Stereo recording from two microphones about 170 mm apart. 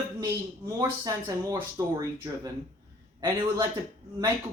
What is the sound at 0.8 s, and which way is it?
Speech, 15° right (ahead or behind).